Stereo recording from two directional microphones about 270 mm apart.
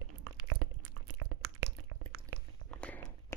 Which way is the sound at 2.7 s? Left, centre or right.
Centre.